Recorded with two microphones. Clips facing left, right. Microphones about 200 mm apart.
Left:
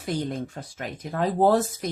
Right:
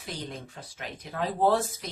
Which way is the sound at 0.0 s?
50° left (ahead or behind).